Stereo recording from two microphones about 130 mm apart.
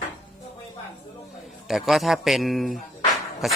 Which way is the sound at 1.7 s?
Centre (ahead or behind).